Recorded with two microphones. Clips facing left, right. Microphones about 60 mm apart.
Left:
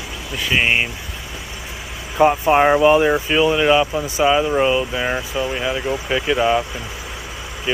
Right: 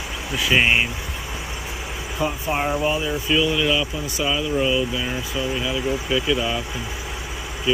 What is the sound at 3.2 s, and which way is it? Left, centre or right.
Speech, left.